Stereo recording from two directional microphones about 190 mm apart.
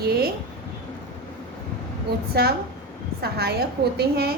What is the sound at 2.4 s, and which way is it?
A woman's voice, 55° right (ahead or behind).